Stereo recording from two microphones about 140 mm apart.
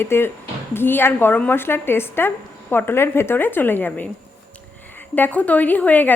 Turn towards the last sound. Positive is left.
turn(degrees=10)  # may be behind; listen again after turning